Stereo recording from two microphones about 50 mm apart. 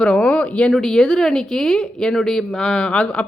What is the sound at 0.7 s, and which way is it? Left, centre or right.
Speech, centre.